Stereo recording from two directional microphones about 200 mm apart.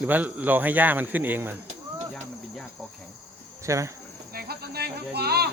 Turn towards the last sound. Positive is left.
turn(degrees=-55)  # may be behind; listen again after turning